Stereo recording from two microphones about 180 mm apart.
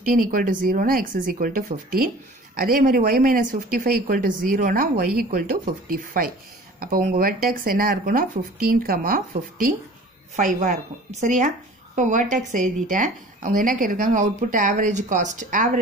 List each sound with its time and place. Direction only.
0.0 s speech: 50° right (ahead or behind)